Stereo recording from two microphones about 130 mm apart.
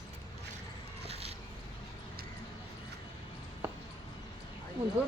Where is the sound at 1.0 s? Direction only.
50° right (ahead or behind).